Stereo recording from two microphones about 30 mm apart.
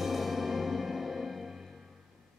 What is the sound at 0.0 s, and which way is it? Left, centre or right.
Music, centre.